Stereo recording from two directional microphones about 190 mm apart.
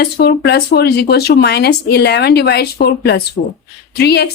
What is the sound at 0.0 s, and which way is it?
A woman's voice, 55° left (ahead or behind).